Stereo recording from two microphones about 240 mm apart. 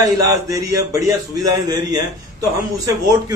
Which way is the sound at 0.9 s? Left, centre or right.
Centre.